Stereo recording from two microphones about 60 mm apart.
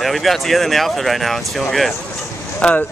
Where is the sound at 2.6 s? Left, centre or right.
Centre.